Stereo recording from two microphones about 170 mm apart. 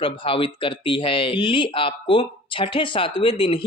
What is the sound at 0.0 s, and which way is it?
Speech, 30° left (ahead or behind).